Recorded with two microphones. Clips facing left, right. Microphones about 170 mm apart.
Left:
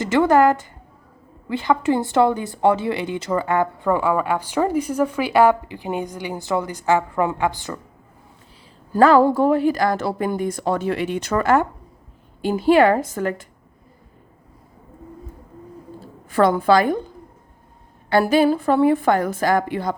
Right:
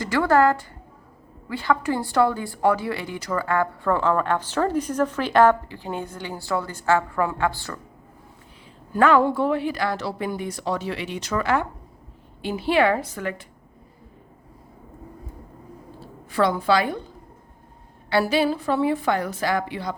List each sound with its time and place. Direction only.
0.0 s a woman's voice: 20° left (ahead or behind)
8.9 s speech: 35° left (ahead or behind)
16.3 s speech: 50° left (ahead or behind)
18.1 s speech: 50° left (ahead or behind)